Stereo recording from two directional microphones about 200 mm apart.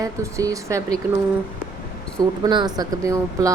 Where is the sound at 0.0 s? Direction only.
15° right (ahead or behind).